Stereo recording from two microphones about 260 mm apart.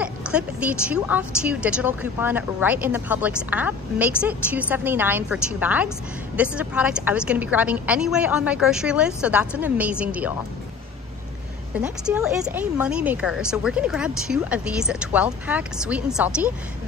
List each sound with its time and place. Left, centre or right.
0.0 s a woman's voice: centre
11.8 s a woman's voice: centre